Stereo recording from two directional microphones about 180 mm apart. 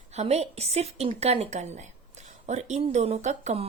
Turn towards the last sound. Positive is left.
turn(degrees=-35)  # may be behind; listen again after turning